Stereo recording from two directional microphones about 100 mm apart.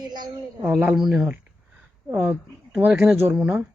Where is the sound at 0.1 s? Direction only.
45° right (ahead or behind).